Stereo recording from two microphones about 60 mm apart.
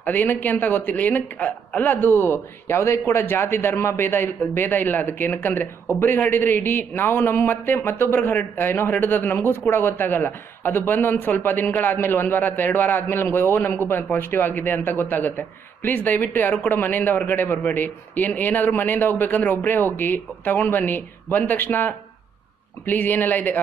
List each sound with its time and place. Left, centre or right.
0.0 s speech: left